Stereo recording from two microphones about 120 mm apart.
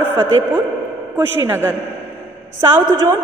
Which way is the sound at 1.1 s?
20° right (ahead or behind).